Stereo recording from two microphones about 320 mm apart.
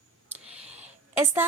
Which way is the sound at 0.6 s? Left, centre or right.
Right.